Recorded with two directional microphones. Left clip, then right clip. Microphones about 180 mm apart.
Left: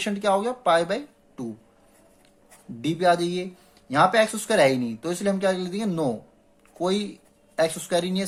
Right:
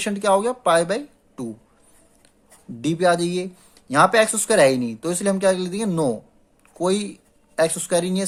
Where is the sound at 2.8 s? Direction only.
30° right (ahead or behind).